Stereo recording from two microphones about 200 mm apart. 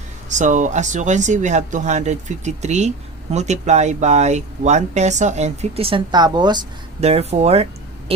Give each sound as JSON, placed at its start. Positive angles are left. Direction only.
{"t": 0.3, "sound": "speech", "side_deg": -40}